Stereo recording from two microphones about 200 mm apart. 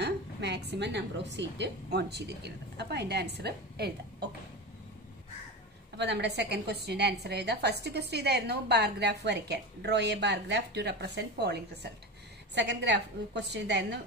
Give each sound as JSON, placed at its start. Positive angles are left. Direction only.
{"t": 0.0, "sound": "a woman's voice", "side_deg": -60}
{"t": 5.9, "sound": "a woman's voice", "side_deg": -60}